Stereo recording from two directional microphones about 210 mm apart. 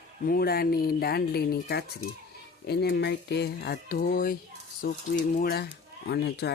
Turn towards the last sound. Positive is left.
turn(degrees=50)  # may be behind; listen again after turning